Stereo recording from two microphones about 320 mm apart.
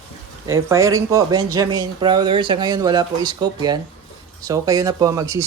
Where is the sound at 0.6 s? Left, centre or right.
Centre.